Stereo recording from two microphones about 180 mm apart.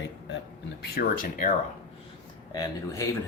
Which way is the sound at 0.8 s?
55° left (ahead or behind).